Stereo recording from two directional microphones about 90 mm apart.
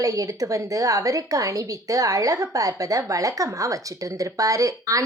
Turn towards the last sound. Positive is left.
turn(degrees=-40)  # may be behind; listen again after turning